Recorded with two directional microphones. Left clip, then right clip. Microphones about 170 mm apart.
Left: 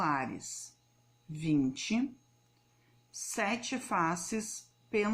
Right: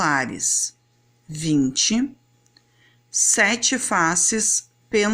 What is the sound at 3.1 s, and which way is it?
A woman's voice, 35° right (ahead or behind).